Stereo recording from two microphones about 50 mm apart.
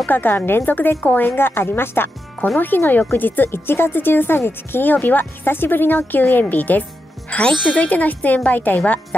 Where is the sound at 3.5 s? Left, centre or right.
Left.